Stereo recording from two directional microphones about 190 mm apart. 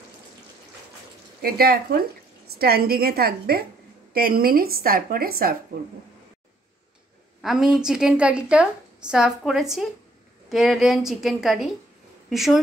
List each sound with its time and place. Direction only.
1.4 s a woman's voice: 55° right (ahead or behind)
7.4 s a woman's voice: 5° right (ahead or behind)